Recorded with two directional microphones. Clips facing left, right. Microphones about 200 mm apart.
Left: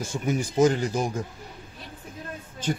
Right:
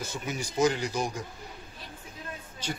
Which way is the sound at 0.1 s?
50° left (ahead or behind).